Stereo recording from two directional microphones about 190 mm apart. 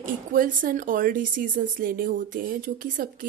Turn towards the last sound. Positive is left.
turn(degrees=-45)  # may be behind; listen again after turning